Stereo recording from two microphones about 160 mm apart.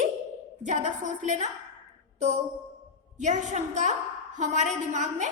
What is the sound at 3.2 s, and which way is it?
A woman's voice, 50° right (ahead or behind).